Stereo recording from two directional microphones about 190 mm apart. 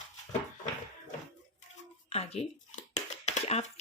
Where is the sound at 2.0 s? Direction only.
35° left (ahead or behind).